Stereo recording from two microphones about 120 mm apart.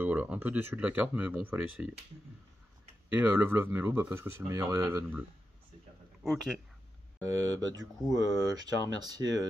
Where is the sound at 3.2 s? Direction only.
15° right (ahead or behind).